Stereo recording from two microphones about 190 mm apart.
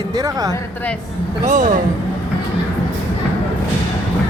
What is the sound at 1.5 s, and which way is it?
Speech, 45° right (ahead or behind).